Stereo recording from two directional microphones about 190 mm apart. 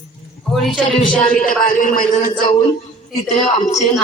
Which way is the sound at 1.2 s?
45° left (ahead or behind).